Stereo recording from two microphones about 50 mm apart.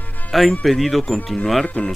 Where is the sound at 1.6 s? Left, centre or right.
Left.